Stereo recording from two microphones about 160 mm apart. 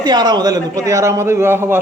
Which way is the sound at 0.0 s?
25° right (ahead or behind).